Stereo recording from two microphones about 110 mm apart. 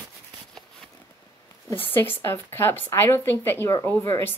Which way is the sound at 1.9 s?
20° left (ahead or behind).